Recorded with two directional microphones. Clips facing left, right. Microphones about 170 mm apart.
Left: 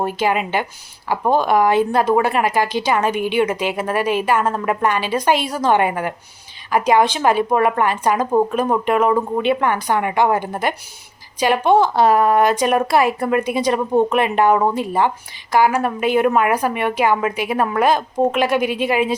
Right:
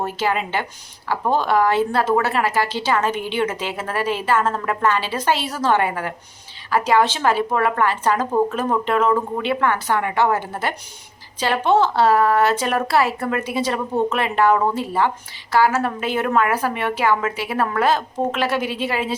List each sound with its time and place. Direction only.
0.0 s a woman's voice: 15° left (ahead or behind)